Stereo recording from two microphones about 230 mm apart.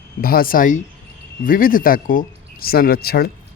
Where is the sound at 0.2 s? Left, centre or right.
Left.